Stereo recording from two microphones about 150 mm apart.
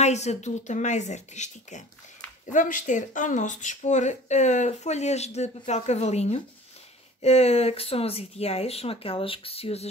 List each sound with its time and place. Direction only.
0.0 s speech: 50° left (ahead or behind)